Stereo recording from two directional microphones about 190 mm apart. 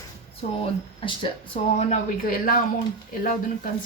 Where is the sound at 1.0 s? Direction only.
25° left (ahead or behind).